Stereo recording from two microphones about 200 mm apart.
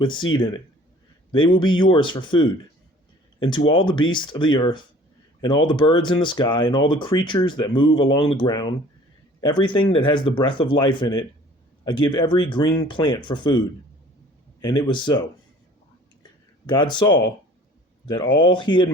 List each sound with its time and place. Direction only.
0.0 s speech: 25° left (ahead or behind)
3.7 s speech: 25° left (ahead or behind)
14.6 s speech: 25° left (ahead or behind)
16.6 s speech: 25° left (ahead or behind)